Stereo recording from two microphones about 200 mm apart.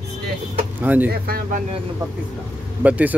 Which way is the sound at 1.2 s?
50° right (ahead or behind).